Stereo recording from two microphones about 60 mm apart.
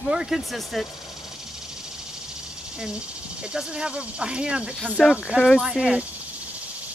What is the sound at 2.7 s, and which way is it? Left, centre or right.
Speech, centre.